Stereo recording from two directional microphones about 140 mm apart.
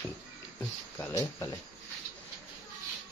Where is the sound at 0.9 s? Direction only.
20° left (ahead or behind).